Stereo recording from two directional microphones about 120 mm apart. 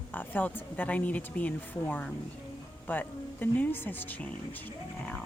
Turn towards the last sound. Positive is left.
turn(degrees=15)  # may be behind; listen again after turning